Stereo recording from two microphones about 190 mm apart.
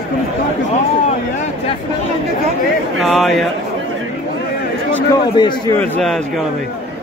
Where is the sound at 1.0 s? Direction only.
35° left (ahead or behind).